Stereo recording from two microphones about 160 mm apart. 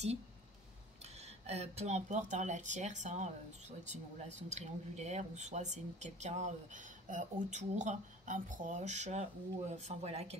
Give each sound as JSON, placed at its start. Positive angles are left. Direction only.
{"t": 1.5, "sound": "speech", "side_deg": -40}